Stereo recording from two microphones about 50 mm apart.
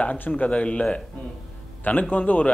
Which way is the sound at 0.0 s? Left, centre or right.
Left.